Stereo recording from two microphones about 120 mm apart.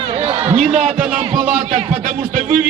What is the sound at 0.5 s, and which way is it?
Speech, 75° right (ahead or behind).